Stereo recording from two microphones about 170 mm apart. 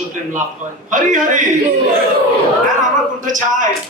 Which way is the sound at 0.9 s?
50° right (ahead or behind).